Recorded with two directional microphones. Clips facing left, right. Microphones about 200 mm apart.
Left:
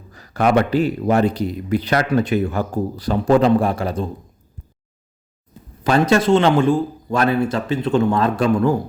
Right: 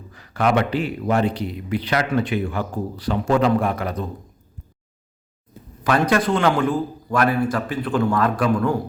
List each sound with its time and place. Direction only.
0.1 s a man's voice: 40° left (ahead or behind)
5.8 s speech: 25° left (ahead or behind)